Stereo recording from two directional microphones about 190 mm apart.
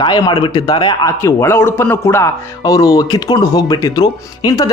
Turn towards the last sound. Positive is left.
turn(degrees=20)  # may be behind; listen again after turning